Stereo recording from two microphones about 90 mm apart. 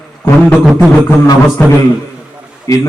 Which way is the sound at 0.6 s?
5° right (ahead or behind).